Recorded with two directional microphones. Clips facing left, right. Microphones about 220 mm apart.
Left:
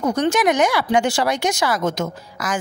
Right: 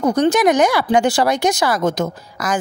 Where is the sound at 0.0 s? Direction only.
35° right (ahead or behind).